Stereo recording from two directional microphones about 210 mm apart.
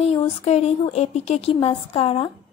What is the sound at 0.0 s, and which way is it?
Speech, 30° left (ahead or behind).